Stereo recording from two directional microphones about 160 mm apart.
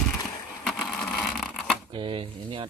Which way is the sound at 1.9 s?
35° right (ahead or behind).